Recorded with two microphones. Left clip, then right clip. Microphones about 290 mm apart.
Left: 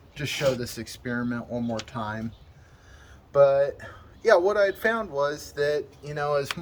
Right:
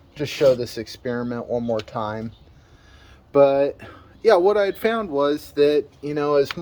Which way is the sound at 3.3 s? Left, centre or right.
Right.